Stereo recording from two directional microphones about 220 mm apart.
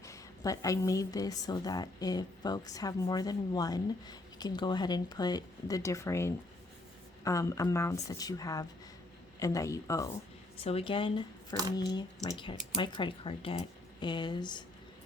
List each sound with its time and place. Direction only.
0.0 s a woman's voice: 15° left (ahead or behind)
10.6 s a woman's voice: 25° left (ahead or behind)